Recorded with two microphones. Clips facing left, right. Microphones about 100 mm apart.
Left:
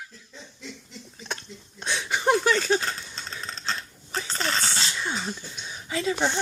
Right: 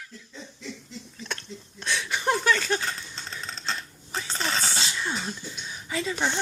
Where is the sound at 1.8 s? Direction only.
25° left (ahead or behind).